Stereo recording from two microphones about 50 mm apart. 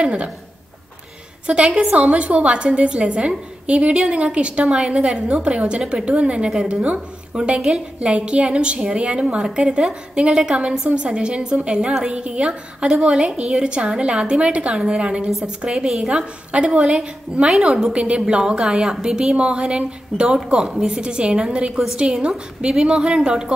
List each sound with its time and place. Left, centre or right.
0.0 s a woman's voice: right
1.5 s a woman's voice: centre